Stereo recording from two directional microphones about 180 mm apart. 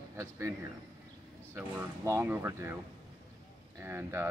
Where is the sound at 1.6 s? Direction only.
15° right (ahead or behind).